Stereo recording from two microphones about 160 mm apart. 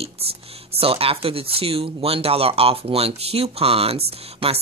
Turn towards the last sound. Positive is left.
turn(degrees=-40)  # may be behind; listen again after turning